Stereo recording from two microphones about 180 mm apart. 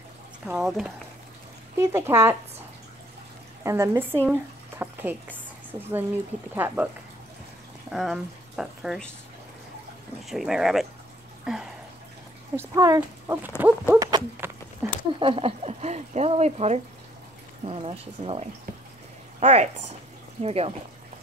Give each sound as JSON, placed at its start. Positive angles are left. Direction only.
{"t": 0.5, "sound": "speech", "side_deg": -5}
{"t": 1.8, "sound": "speech", "side_deg": -15}
{"t": 3.6, "sound": "a woman's voice", "side_deg": -15}
{"t": 7.9, "sound": "speech", "side_deg": 0}
{"t": 10.2, "sound": "speech", "side_deg": 0}
{"t": 12.5, "sound": "speech", "side_deg": -20}
{"t": 13.9, "sound": "clip-clop", "side_deg": -20}
{"t": 14.8, "sound": "a sound", "side_deg": -15}
{"t": 15.1, "sound": "speech", "side_deg": -30}
{"t": 19.4, "sound": "speech", "side_deg": -35}